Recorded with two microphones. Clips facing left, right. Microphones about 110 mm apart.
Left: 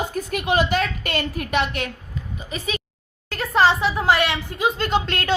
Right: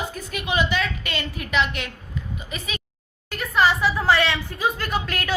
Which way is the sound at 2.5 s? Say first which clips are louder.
Left 9 dB; 35° left (ahead or behind).